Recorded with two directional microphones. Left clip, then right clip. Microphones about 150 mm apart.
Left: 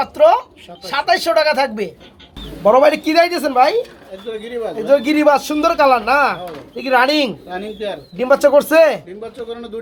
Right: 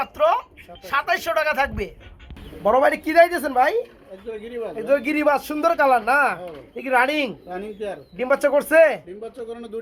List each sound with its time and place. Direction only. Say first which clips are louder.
0.0 s speech: left 8 dB; 35° left (ahead or behind)
2.6 s speech: left 7 dB; 5° right (ahead or behind)
4.8 s speech: left 7 dB; 5° right (ahead or behind)
7.5 s speech: left 5 dB; 25° right (ahead or behind)
8.1 s speech: left 7 dB; centre (ahead or behind)